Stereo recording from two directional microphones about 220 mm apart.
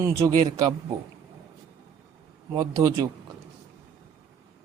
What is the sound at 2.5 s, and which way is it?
Speech, 15° right (ahead or behind).